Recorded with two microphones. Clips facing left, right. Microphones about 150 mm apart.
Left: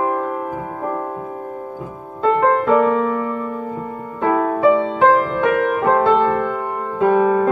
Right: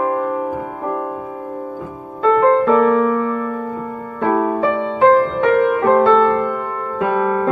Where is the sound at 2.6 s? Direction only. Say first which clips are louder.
Right 2 dB; 15° left (ahead or behind).